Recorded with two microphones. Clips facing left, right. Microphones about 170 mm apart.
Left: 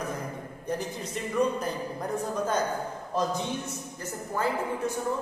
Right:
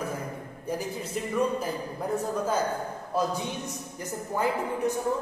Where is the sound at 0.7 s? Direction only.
5° right (ahead or behind).